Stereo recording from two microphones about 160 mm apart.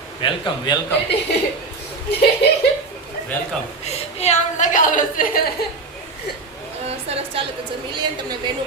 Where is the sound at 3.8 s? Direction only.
45° left (ahead or behind).